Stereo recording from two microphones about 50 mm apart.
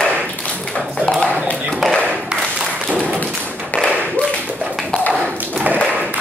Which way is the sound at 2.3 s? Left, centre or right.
Centre.